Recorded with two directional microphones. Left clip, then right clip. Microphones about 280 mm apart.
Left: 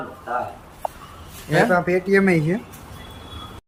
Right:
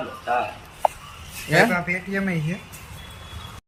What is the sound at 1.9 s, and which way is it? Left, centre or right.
Speech, left.